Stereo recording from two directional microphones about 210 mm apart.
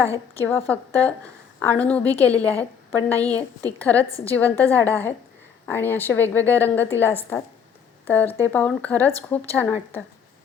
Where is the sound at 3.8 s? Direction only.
10° left (ahead or behind).